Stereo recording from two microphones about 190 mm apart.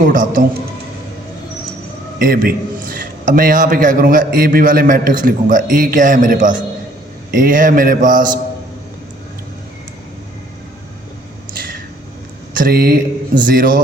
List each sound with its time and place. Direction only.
0.0 s a man's voice: 45° right (ahead or behind)
2.1 s a man's voice: 50° right (ahead or behind)
12.5 s a man's voice: 50° right (ahead or behind)